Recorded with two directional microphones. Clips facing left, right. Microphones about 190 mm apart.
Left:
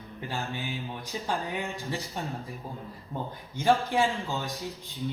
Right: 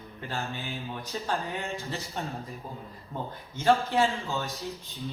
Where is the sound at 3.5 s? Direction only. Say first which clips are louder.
Right 1 dB; 15° left (ahead or behind).